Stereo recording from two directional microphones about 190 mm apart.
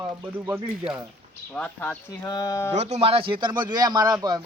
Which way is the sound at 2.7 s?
35° right (ahead or behind).